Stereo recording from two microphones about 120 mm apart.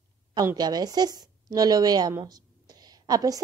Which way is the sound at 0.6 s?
35° right (ahead or behind).